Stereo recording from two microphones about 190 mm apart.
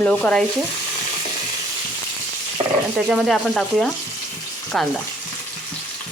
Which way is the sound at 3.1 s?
Centre (ahead or behind).